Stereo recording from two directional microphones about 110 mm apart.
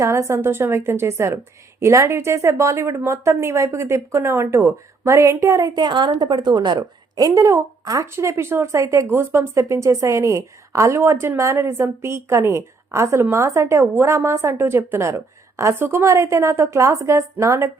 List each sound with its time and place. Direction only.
0.0 s a woman's voice: 25° right (ahead or behind)
5.7 s a woman's voice: 45° right (ahead or behind); by 17.7 s 25° right (ahead or behind)